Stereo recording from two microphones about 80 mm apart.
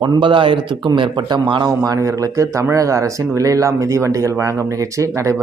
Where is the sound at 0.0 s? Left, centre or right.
Right.